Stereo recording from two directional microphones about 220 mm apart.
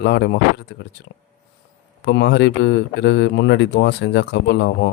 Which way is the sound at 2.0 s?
50° left (ahead or behind).